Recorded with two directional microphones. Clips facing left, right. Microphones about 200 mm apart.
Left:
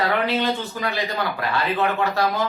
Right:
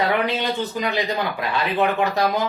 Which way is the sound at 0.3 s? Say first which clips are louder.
Left 1 dB; 15° right (ahead or behind).